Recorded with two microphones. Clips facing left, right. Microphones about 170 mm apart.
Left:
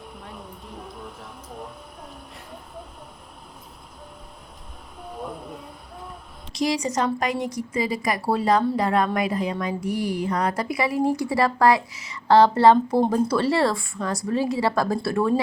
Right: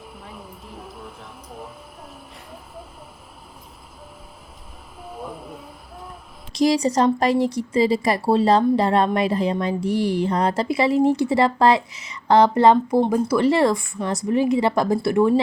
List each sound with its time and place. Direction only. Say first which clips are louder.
0.0 s music: even; centre (ahead or behind)
5.0 s vehicle: even; 5° right (ahead or behind)
6.5 s a woman's voice: right 6 dB; 35° right (ahead or behind); by 15.4 s 15° right (ahead or behind)